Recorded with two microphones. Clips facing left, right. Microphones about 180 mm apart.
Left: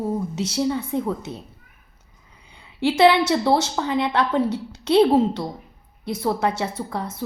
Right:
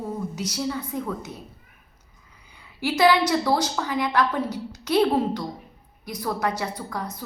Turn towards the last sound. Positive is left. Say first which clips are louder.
# left 3 dB
turn(degrees=25)  # may be behind; listen again after turning